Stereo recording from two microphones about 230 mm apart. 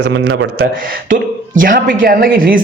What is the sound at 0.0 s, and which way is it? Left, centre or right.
Speech, right.